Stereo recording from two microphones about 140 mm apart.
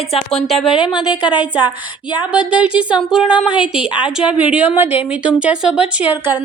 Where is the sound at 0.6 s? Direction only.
35° left (ahead or behind).